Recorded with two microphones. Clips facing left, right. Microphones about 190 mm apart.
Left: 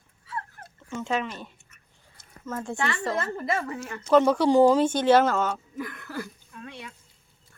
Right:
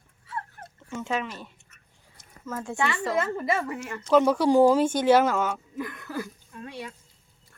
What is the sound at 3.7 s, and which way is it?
Speech, 5° right (ahead or behind).